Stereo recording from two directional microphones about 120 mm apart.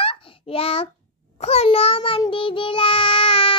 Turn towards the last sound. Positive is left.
turn(degrees=50)  # may be behind; listen again after turning